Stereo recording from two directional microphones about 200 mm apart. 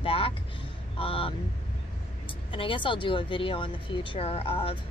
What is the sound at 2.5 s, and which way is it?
Speech, 25° left (ahead or behind).